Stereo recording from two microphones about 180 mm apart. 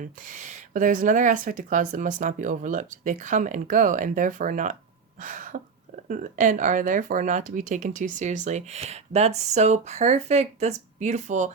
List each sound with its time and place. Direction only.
0.0 s speech: 45° right (ahead or behind)
5.2 s a sound: 45° right (ahead or behind)
6.1 s speech: 45° right (ahead or behind)